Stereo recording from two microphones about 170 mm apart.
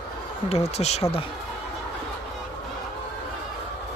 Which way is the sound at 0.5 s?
40° left (ahead or behind).